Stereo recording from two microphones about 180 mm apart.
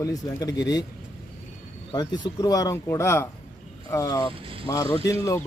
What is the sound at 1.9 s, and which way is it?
A man's voice, 25° left (ahead or behind).